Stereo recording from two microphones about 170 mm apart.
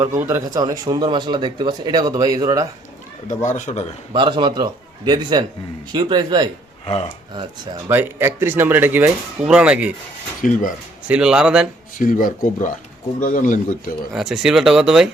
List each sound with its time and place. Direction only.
0.2 s speech: 15° right (ahead or behind)
3.2 s speech: 45° left (ahead or behind)
4.1 s speech: 30° right (ahead or behind)
7.9 s speech: 15° right (ahead or behind)
10.4 s speech: 50° left (ahead or behind)
11.1 s speech: 5° right (ahead or behind)
11.9 s speech: 55° left (ahead or behind)
14.1 s speech: centre (ahead or behind)